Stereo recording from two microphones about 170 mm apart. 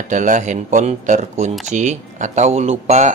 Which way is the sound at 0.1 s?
50° right (ahead or behind).